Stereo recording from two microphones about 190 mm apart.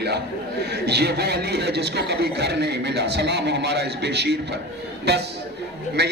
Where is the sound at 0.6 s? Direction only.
60° right (ahead or behind).